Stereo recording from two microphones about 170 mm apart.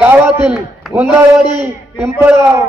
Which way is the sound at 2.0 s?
10° right (ahead or behind).